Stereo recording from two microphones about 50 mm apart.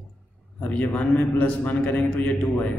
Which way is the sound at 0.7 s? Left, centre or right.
Left.